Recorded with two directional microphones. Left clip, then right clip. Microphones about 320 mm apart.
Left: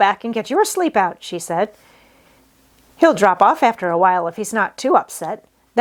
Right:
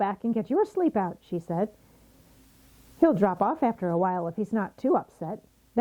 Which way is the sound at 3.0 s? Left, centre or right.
Centre.